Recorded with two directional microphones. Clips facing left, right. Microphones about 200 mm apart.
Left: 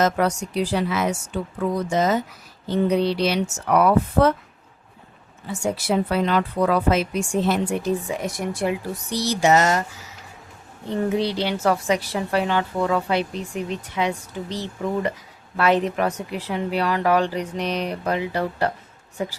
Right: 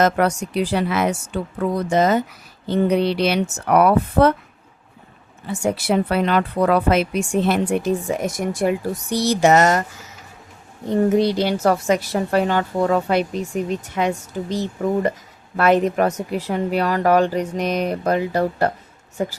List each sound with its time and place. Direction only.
0.0 s speech: 60° right (ahead or behind)
5.5 s speech: 60° right (ahead or behind)
10.8 s a woman's voice: 45° right (ahead or behind)